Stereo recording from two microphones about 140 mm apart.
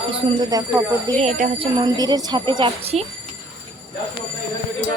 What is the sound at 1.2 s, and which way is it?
Speech, 55° right (ahead or behind).